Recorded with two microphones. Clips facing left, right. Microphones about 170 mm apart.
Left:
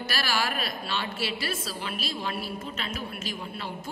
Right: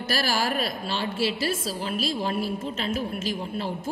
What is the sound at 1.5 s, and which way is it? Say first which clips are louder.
Speech: right 5 dB; 45° right (ahead or behind).